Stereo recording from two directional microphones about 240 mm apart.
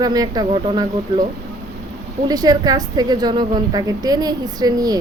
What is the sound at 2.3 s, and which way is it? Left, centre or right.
Speech, centre.